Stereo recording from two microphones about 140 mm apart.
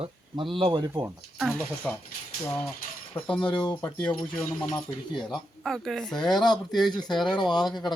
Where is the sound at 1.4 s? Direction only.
Centre (ahead or behind).